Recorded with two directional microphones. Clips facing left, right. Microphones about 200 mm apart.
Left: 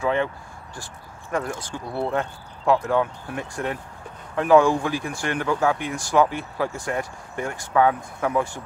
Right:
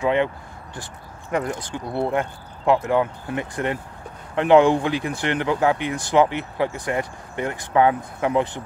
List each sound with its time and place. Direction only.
0.0 s speech: 20° right (ahead or behind)
1.3 s speech: 20° right (ahead or behind)
5.9 s speech: 60° right (ahead or behind)
6.1 s speech: 20° right (ahead or behind)